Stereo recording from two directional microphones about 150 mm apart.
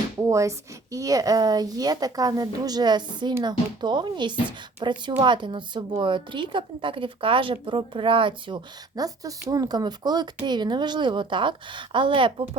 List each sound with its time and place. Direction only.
0.2 s speech: 20° right (ahead or behind)